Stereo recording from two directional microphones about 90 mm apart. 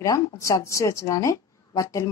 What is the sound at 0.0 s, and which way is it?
Speech, 35° left (ahead or behind).